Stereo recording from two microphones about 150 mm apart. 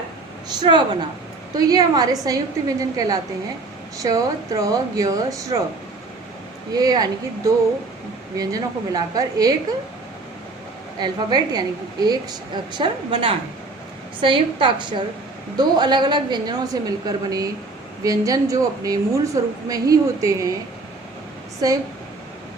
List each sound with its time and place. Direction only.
1.5 s a woman's voice: 25° right (ahead or behind)
6.7 s a woman's voice: 25° right (ahead or behind)
11.0 s a woman's voice: 30° right (ahead or behind)
21.6 s a woman's voice: 25° right (ahead or behind)